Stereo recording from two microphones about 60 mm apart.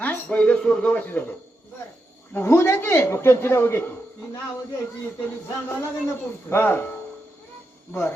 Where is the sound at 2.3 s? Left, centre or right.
Left.